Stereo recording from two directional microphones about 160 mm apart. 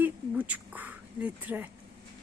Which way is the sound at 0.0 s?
10° right (ahead or behind).